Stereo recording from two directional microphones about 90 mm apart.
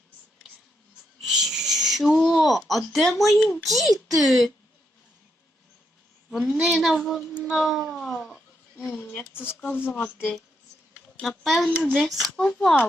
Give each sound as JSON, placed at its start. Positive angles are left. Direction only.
{"t": 1.2, "sound": "a sound", "side_deg": -5}
{"t": 2.6, "sound": "speech", "side_deg": 0}
{"t": 6.3, "sound": "a woman's voice", "side_deg": -10}
{"t": 6.7, "sound": "speech", "side_deg": 5}
{"t": 9.0, "sound": "speech", "side_deg": 25}
{"t": 11.2, "sound": "speech", "side_deg": 0}